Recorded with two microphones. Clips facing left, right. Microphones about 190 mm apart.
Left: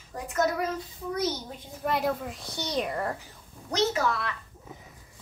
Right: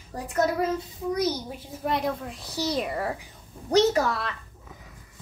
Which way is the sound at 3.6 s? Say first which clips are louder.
Right 6 dB; 35° right (ahead or behind).